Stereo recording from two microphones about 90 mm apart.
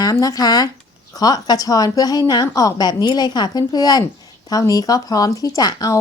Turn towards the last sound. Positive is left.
turn(degrees=45)  # may be behind; listen again after turning